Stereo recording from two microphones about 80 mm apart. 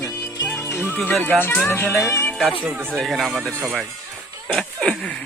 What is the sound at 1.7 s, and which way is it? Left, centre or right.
Speech, left.